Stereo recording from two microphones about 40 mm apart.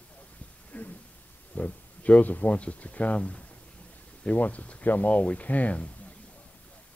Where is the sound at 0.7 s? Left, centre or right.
Left.